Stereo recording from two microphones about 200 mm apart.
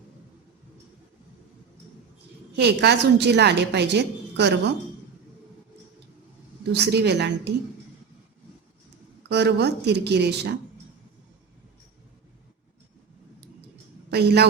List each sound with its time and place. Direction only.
2.6 s a woman's voice: 55° right (ahead or behind)
6.7 s a woman's voice: 55° right (ahead or behind)
9.3 s a woman's voice: 55° right (ahead or behind)
14.1 s a woman's voice: 55° right (ahead or behind)